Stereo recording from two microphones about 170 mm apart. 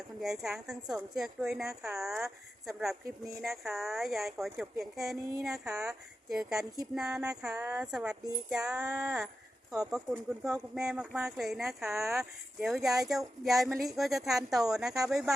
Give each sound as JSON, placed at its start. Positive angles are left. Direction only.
{"t": 0.2, "sound": "speech", "side_deg": 0}